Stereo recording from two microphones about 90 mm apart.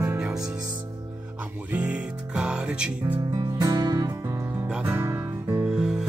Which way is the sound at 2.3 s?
10° right (ahead or behind).